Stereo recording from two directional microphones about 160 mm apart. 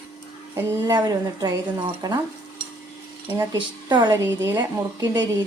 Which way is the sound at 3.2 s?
20° right (ahead or behind).